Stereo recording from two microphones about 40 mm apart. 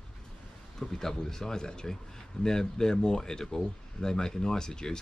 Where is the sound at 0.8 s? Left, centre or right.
Centre.